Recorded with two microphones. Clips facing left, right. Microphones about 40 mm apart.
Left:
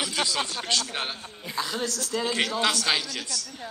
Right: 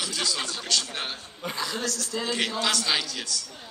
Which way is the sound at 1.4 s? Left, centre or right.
Right.